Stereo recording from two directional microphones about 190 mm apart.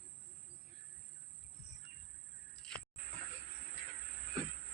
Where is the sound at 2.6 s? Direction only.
5° left (ahead or behind).